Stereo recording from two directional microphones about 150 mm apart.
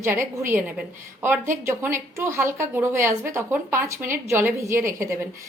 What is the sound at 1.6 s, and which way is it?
A woman's voice, 15° right (ahead or behind).